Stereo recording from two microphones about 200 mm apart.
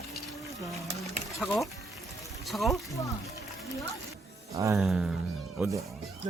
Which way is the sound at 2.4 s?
Centre (ahead or behind).